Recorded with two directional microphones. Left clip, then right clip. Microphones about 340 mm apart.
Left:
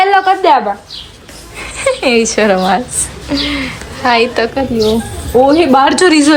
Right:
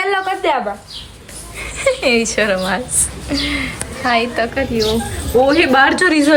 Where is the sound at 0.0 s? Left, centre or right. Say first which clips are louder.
Left 8 dB; left.